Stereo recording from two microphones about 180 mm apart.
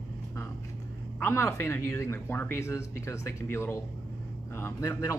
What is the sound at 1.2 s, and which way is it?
Speech, 10° left (ahead or behind).